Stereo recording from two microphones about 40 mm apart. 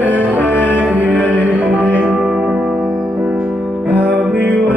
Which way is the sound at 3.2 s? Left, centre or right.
Right.